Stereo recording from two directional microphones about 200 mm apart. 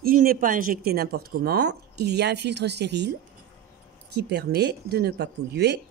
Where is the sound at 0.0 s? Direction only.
45° right (ahead or behind).